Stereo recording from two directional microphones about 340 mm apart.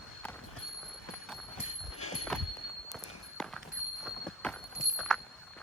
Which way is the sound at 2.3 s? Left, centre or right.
Centre.